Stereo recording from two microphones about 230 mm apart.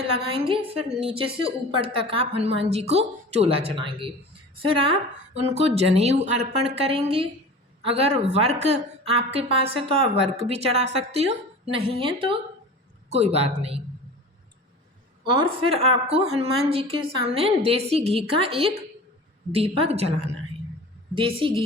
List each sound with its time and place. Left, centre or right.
0.2 s speech: right
15.3 s speech: right